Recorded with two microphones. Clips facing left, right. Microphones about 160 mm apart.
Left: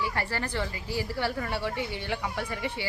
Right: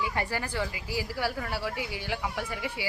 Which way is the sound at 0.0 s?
15° right (ahead or behind).